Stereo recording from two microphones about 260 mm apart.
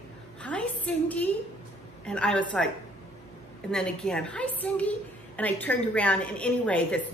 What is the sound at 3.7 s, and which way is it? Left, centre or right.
A woman's voice, centre.